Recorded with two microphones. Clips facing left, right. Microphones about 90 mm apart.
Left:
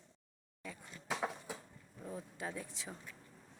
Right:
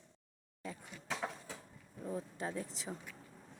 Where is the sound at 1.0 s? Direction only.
15° left (ahead or behind).